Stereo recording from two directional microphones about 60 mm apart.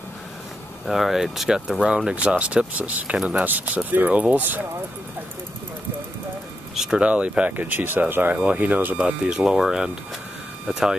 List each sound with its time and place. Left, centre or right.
0.8 s speech: centre
2.2 s speech: right
6.7 s speech: centre
7.0 s speech: centre
7.5 s speech: right
8.9 s speech: centre